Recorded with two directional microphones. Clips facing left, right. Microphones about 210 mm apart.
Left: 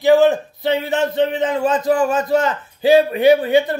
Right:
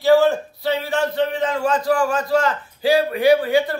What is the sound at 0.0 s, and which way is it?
A man's voice, 20° left (ahead or behind).